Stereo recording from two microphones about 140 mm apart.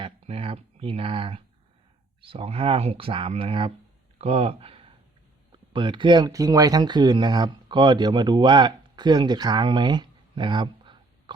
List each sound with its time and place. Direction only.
0.0 s speech: 45° right (ahead or behind)